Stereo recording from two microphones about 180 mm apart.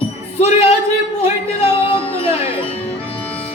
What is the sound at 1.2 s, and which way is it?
Music, 30° left (ahead or behind).